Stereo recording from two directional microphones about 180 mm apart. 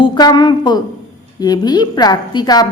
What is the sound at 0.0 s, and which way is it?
A woman's voice, 25° left (ahead or behind).